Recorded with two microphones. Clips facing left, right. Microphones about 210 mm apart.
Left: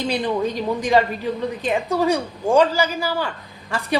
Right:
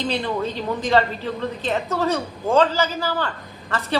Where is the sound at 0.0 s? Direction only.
15° left (ahead or behind).